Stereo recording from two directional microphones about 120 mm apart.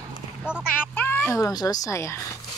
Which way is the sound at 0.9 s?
15° left (ahead or behind).